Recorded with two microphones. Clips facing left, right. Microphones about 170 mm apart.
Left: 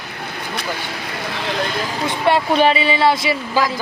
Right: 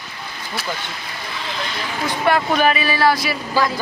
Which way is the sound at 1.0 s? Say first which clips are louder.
Left 5 dB; 60° left (ahead or behind).